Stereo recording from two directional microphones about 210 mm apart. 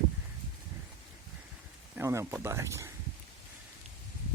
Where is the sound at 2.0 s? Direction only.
10° right (ahead or behind).